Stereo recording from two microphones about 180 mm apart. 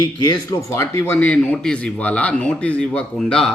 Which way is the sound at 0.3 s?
15° left (ahead or behind).